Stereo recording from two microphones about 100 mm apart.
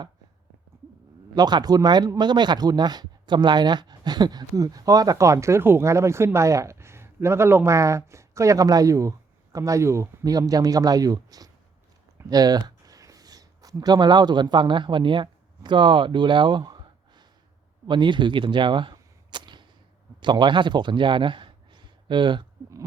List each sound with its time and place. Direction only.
1.4 s speech: 45° right (ahead or behind)
17.8 s camera: 50° right (ahead or behind)
20.2 s a man's voice: 50° right (ahead or behind)